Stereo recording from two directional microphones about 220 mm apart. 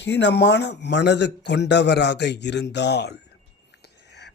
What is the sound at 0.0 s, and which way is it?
A man's voice, 50° left (ahead or behind).